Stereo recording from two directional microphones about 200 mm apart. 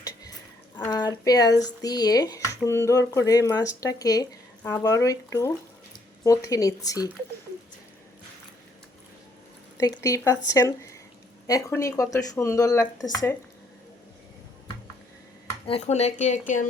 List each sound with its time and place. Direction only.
0.8 s speech: 20° left (ahead or behind)
9.7 s speech: 15° left (ahead or behind)
15.6 s speech: 30° left (ahead or behind)